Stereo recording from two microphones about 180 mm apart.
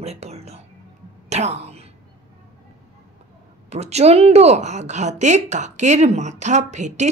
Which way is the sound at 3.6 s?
35° right (ahead or behind).